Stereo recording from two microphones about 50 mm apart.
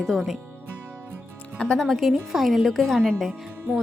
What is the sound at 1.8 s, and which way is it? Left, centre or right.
A woman's voice, centre.